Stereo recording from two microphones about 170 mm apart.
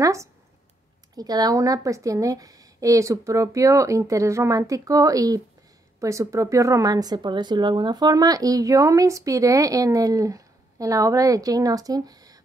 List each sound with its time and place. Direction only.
0.0 s speech: 20° right (ahead or behind)